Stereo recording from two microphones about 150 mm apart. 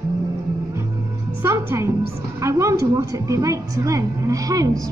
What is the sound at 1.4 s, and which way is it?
A woman's voice, 15° right (ahead or behind).